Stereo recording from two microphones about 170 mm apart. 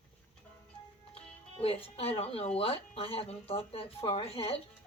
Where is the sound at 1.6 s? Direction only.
35° left (ahead or behind).